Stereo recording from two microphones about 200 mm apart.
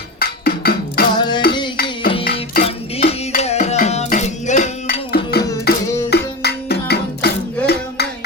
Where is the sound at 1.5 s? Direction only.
25° left (ahead or behind).